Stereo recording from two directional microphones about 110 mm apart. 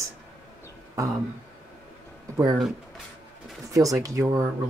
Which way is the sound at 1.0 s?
30° right (ahead or behind).